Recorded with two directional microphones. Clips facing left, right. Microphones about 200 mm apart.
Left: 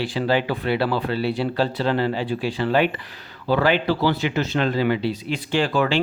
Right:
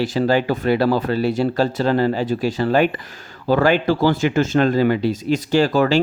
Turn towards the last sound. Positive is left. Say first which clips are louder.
# right 5 dB
turn(degrees=-40)  # may be behind; listen again after turning